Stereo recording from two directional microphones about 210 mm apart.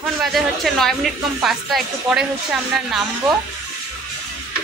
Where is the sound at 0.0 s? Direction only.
Centre (ahead or behind).